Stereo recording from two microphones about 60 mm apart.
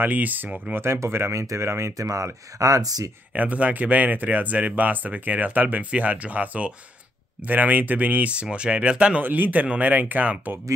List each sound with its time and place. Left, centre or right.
0.0 s speech: right
0.7 s speech: right
2.0 s speech: right
2.6 s speech: right
3.3 s speech: right
9.2 s speech: right